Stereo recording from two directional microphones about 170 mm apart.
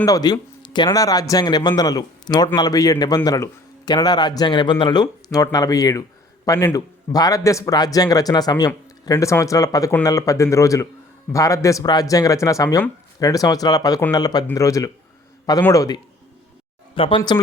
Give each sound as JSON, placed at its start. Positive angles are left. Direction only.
{"t": 0.0, "sound": "speech", "side_deg": 25}
{"t": 16.9, "sound": "speech", "side_deg": 30}